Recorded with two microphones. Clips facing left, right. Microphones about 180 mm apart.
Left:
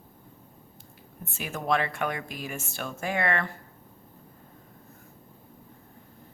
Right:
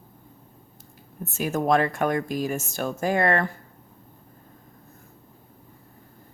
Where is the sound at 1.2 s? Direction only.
45° right (ahead or behind).